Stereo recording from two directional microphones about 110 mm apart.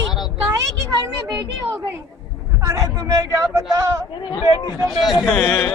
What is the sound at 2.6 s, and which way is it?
Speech, 30° right (ahead or behind).